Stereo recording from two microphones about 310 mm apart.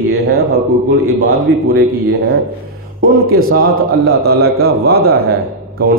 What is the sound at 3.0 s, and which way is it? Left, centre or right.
A man's voice, right.